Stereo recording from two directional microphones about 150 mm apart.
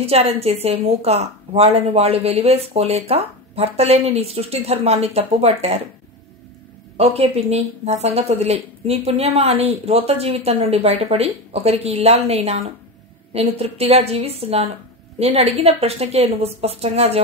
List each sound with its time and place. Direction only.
0.0 s a woman's voice: 45° right (ahead or behind)
7.0 s a woman's voice: 45° right (ahead or behind)